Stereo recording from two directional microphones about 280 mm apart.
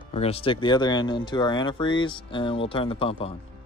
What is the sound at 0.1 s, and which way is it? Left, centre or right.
Speech, left.